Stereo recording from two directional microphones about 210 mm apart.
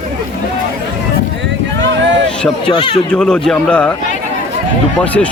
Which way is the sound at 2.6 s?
25° left (ahead or behind).